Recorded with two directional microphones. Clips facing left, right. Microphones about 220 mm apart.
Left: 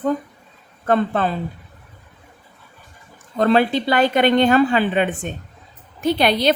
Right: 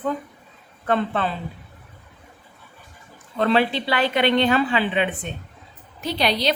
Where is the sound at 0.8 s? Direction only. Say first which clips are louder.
Left 4 dB; 45° left (ahead or behind).